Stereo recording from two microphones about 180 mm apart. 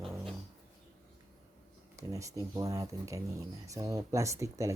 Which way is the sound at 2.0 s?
15° right (ahead or behind).